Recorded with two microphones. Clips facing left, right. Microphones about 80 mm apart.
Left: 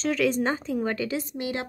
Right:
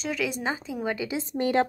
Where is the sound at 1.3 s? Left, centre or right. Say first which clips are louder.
Right 7 dB; right.